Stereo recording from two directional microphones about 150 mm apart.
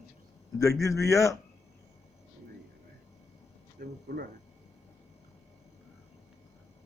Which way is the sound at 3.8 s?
90° right.